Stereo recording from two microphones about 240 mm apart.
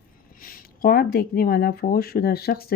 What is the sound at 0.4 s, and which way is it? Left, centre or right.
Speech, left.